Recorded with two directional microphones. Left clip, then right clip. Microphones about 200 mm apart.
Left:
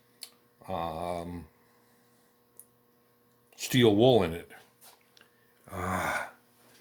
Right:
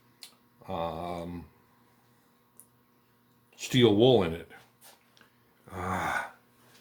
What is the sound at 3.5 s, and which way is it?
Speech, 45° left (ahead or behind).